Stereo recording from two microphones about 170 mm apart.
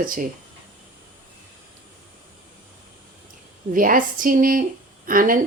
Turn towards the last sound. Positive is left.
turn(degrees=-55)  # may be behind; listen again after turning